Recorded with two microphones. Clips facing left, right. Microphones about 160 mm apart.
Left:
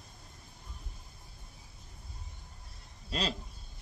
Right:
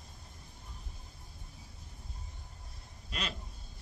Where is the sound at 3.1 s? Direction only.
30° left (ahead or behind).